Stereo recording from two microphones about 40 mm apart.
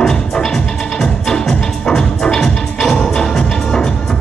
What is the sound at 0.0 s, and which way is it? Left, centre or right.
Music, centre.